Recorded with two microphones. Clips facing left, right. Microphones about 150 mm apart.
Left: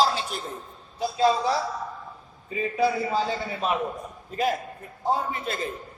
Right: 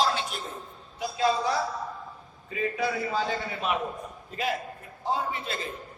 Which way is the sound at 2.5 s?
30° left (ahead or behind).